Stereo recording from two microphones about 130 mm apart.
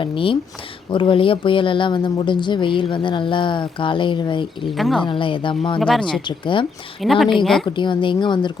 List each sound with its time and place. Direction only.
0.0 s speech: 40° left (ahead or behind)
4.7 s speech: centre (ahead or behind)
5.0 s speech: 40° left (ahead or behind)
5.8 s speech: 5° left (ahead or behind)
6.2 s speech: 40° left (ahead or behind)
7.0 s speech: centre (ahead or behind)
7.8 s speech: 35° left (ahead or behind)